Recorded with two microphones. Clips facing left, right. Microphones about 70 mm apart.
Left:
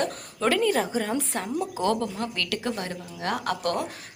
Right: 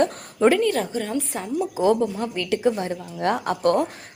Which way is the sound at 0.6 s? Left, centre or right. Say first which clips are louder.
Right 1 dB; centre.